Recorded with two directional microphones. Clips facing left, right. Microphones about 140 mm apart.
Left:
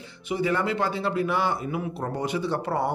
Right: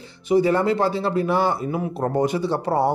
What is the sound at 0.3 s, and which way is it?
Speech, 35° right (ahead or behind).